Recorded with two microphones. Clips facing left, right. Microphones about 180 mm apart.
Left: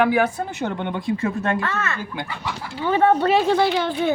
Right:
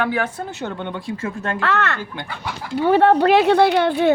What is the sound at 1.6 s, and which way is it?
Speech, 75° right (ahead or behind).